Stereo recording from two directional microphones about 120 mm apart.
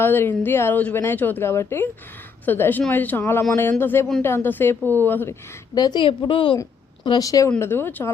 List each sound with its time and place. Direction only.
0.0 s a woman's voice: 20° left (ahead or behind)
4.8 s speech: 25° right (ahead or behind)
5.0 s speech: 15° left (ahead or behind)
5.7 s speech: 35° left (ahead or behind)
7.0 s a woman's voice: 35° left (ahead or behind)
7.6 s a woman's voice: 20° left (ahead or behind)